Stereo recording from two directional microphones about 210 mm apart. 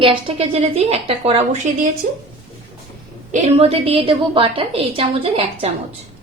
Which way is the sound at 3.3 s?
30° right (ahead or behind).